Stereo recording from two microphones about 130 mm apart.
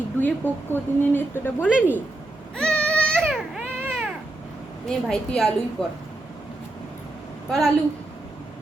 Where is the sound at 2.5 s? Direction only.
10° left (ahead or behind).